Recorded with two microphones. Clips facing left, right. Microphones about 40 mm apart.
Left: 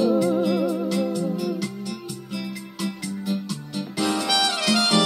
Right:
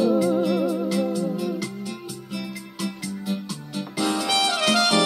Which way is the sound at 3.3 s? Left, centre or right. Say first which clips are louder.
Left 2 dB; right.